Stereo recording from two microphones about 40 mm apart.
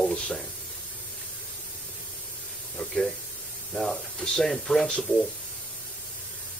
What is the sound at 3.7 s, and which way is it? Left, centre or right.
Speech, centre.